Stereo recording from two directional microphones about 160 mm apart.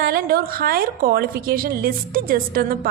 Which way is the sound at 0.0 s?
70° right (ahead or behind).